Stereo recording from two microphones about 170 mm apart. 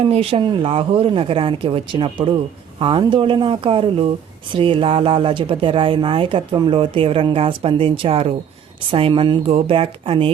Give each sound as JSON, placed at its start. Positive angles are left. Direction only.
{"t": 0.0, "sound": "speech", "side_deg": -35}